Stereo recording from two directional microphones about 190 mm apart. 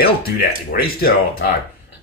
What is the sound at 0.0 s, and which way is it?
Speech, 50° left (ahead or behind).